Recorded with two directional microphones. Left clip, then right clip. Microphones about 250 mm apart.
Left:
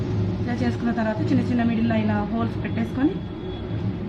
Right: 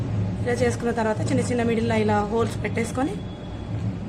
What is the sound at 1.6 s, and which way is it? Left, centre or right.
Speech, right.